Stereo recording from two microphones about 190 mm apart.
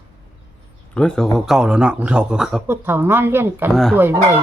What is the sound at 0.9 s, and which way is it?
A man's voice, 5° left (ahead or behind).